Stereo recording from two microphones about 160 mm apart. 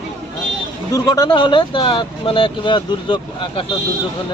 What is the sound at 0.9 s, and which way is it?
Speech, 25° left (ahead or behind).